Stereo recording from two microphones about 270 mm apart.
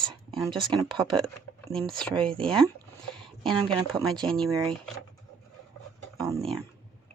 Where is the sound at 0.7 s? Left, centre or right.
Centre.